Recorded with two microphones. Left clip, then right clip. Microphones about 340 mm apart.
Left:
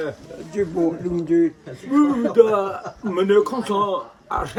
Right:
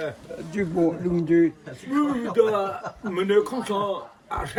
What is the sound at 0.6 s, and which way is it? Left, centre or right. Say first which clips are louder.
Speech: left 2 dB; right.